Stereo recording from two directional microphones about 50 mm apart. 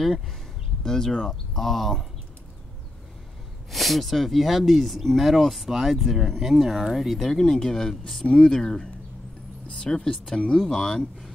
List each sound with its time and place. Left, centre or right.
0.8 s speech: centre
3.7 s speech: centre
8.3 s speech: left